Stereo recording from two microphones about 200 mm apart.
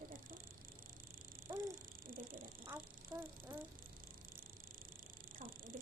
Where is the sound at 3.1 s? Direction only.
15° right (ahead or behind).